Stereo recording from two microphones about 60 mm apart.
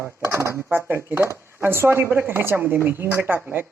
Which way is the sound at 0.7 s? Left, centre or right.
Right.